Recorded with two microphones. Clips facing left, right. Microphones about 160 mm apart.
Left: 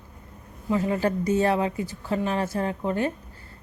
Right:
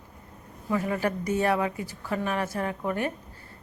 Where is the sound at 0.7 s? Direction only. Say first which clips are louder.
Left 3 dB; 25° left (ahead or behind).